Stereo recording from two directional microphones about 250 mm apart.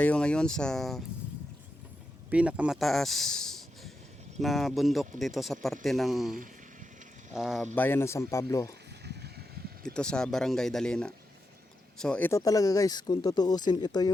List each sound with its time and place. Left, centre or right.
0.0 s speech: centre
2.3 s speech: centre
7.3 s speech: centre
9.0 s a sound: right
9.8 s speech: centre